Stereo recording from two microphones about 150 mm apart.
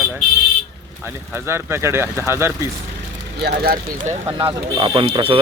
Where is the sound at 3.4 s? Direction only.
90° right.